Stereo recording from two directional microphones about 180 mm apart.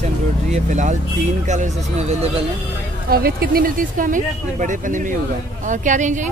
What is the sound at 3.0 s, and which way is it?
Speech, 55° right (ahead or behind).